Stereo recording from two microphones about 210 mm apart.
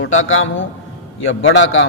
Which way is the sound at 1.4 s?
60° left (ahead or behind).